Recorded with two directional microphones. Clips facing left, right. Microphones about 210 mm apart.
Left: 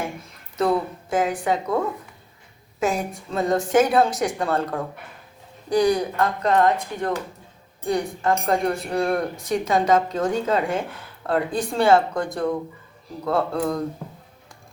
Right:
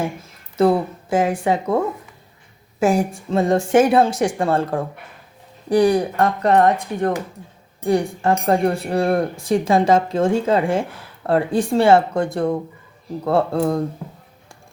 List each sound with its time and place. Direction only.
0.5 s speech: 30° right (ahead or behind)
2.8 s speech: 30° right (ahead or behind)